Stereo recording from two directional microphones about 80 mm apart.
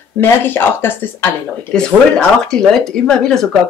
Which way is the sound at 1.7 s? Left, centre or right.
Centre.